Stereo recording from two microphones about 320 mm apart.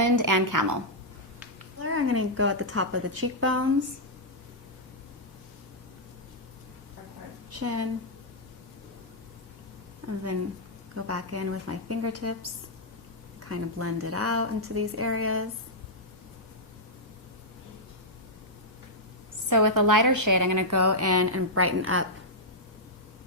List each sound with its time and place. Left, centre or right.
0.0 s a woman's voice: right
1.8 s a woman's voice: right
7.5 s a woman's voice: right
10.9 s a woman's voice: right
13.5 s a woman's voice: right
19.5 s a woman's voice: right